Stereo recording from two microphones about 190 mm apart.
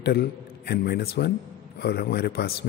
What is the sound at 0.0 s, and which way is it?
A man's voice, 60° left (ahead or behind).